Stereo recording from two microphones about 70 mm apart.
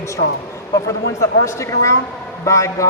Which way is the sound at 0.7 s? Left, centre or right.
Left.